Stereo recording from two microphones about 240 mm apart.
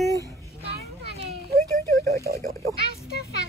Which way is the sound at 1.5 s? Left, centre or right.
Right.